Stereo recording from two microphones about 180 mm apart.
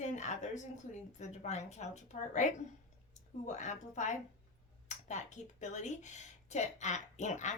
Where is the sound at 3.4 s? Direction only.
40° left (ahead or behind).